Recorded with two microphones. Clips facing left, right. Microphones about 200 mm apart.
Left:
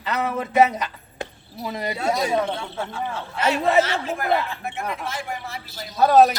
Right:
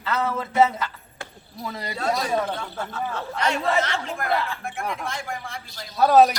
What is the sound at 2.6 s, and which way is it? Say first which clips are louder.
A man's voice: left 1 dB; 10° left (ahead or behind).